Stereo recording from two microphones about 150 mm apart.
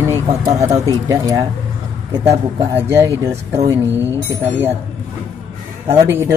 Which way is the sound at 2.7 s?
15° right (ahead or behind).